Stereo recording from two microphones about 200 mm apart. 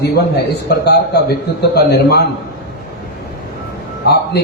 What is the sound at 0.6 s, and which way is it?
A man's voice, 55° left (ahead or behind).